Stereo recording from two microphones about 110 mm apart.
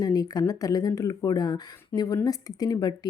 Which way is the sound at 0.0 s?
35° left (ahead or behind).